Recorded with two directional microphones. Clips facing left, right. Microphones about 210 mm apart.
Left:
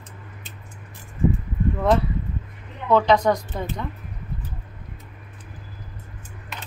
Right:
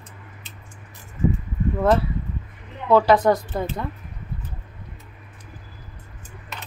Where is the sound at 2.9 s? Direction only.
5° right (ahead or behind).